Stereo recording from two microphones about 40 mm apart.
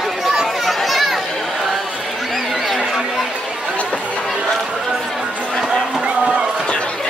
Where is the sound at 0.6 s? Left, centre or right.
Centre.